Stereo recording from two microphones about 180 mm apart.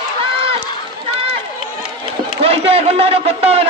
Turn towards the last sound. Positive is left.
turn(degrees=-35)  # may be behind; listen again after turning